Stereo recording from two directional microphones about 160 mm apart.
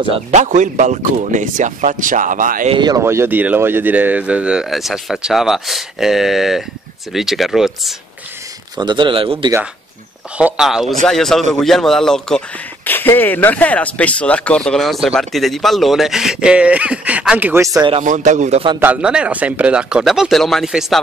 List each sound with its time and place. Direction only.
0.3 s speech: 50° right (ahead or behind)
2.7 s speech: 25° right (ahead or behind)
3.0 s a man's voice: 15° right (ahead or behind)
8.7 s speech: 30° right (ahead or behind)
10.3 s a man's voice: 5° right (ahead or behind)
17.7 s speech: 30° right (ahead or behind)
18.0 s speech: 50° right (ahead or behind)
18.8 s a man's voice: 10° right (ahead or behind)